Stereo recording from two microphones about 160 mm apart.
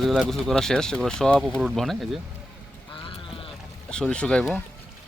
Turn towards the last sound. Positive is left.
turn(degrees=5)  # may be behind; listen again after turning